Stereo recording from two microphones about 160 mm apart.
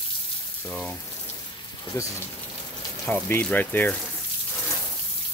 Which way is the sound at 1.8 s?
20° left (ahead or behind).